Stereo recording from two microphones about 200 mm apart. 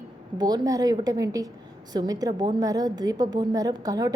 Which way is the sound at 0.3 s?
20° right (ahead or behind).